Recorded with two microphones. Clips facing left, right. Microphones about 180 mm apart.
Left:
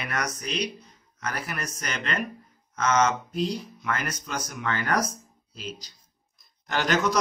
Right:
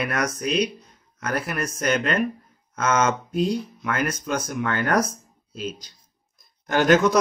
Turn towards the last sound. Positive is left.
turn(degrees=-50)  # may be behind; listen again after turning